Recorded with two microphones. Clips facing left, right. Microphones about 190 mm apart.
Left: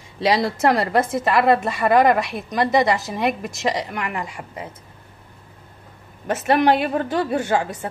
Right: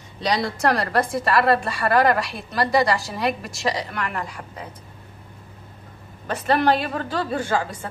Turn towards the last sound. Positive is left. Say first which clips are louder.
# left 3 dB
turn(degrees=20)  # may be behind; listen again after turning